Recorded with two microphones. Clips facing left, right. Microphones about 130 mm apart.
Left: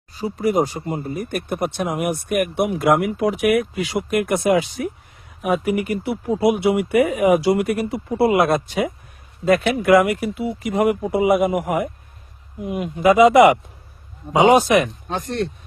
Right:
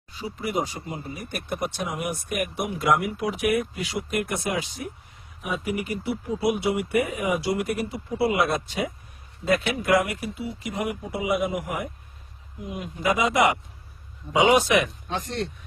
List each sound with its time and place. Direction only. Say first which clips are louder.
0.1 s speech: left 9 dB; 40° left (ahead or behind); by 8.9 s 60° left (ahead or behind)
9.6 s speech: left 10 dB; 75° left (ahead or behind)
14.4 s speech: left 6 dB; 40° left (ahead or behind)